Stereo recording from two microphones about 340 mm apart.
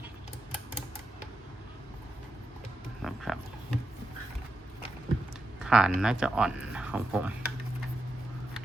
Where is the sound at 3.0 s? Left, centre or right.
Centre.